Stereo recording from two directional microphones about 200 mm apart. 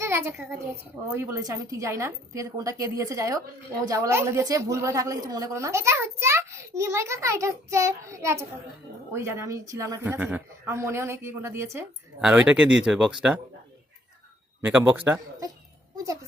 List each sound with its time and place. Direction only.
0.0 s a child's voice: 15° right (ahead or behind)
14.6 s a woman's voice: 10° right (ahead or behind)